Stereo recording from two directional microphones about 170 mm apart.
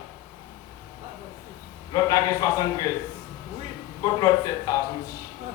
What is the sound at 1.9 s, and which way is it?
Speech, 20° left (ahead or behind).